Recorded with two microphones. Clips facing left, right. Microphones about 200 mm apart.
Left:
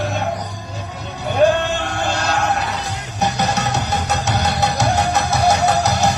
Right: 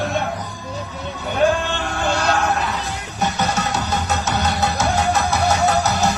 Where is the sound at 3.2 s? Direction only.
40° left (ahead or behind).